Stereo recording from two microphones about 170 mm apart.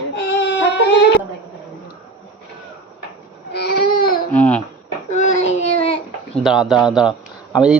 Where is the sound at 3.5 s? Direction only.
70° left (ahead or behind).